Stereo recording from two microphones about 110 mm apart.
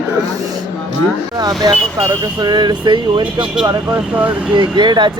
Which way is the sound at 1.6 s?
35° right (ahead or behind).